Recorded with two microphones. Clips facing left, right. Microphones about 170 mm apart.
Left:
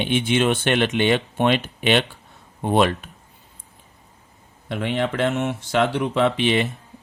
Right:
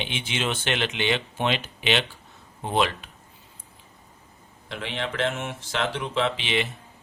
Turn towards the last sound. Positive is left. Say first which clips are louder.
# left 6 dB
turn(degrees=50)  # may be behind; listen again after turning